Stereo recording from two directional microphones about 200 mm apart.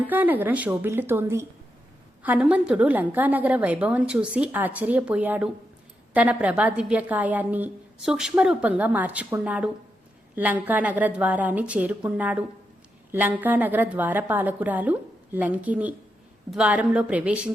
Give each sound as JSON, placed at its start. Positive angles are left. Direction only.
{"t": 0.1, "sound": "a woman's voice", "side_deg": -10}